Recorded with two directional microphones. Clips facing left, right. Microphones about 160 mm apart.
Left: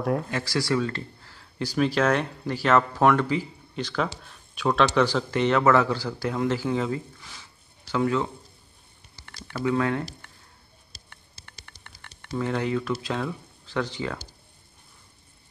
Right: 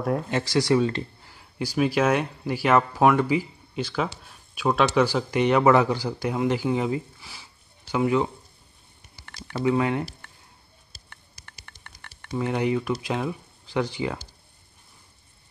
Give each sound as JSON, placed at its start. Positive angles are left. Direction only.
{"t": 0.0, "sound": "speech", "side_deg": 0}
{"t": 0.3, "sound": "speech", "side_deg": -20}
{"t": 11.7, "sound": "a sound", "side_deg": -50}
{"t": 12.1, "sound": "speech", "side_deg": -15}